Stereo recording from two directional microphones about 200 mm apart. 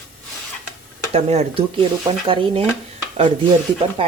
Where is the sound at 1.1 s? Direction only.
30° right (ahead or behind).